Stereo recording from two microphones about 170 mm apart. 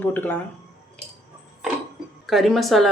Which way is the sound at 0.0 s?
10° left (ahead or behind).